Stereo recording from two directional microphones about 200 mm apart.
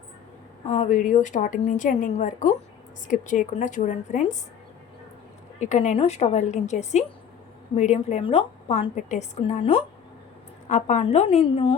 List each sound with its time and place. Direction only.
0.7 s a woman's voice: 35° left (ahead or behind)
5.5 s a woman's voice: 35° left (ahead or behind)